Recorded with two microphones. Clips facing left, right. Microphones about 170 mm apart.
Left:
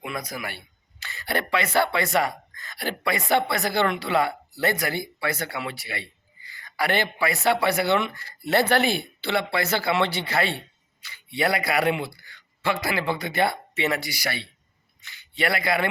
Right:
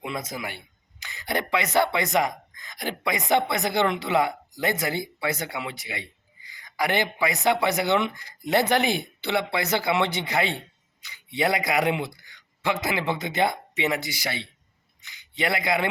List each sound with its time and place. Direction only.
0.0 s a man's voice: 25° right (ahead or behind)